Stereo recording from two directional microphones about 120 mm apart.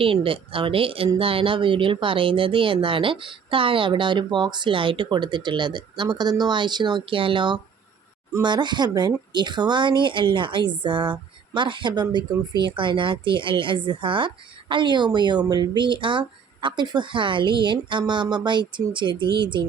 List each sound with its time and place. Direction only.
0.0 s speech: 50° right (ahead or behind)